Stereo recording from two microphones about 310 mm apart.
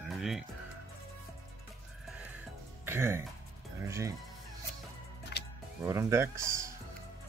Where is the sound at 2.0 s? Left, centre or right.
Centre.